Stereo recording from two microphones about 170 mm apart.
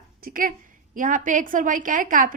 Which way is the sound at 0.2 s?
55° right (ahead or behind).